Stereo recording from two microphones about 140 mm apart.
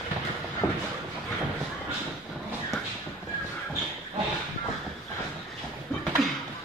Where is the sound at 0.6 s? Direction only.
30° left (ahead or behind).